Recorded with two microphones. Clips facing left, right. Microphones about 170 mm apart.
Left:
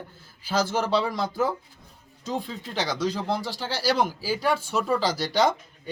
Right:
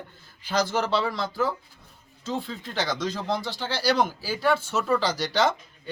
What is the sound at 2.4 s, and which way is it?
Speech, 10° left (ahead or behind).